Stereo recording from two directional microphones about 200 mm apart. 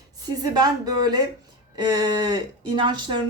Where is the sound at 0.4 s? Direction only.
20° right (ahead or behind).